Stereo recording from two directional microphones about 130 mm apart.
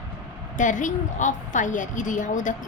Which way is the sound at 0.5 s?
75° left (ahead or behind).